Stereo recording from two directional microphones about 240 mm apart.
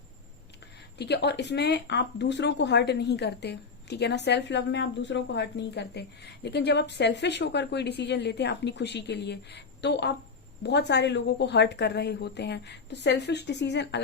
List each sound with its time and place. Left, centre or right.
0.9 s speech: left